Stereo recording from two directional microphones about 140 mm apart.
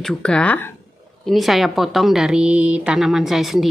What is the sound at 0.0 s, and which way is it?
Speech, 5° left (ahead or behind).